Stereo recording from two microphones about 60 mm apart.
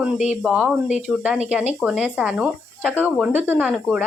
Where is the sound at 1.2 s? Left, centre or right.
Centre.